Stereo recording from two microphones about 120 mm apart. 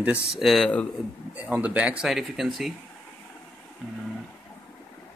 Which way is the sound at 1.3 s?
10° right (ahead or behind).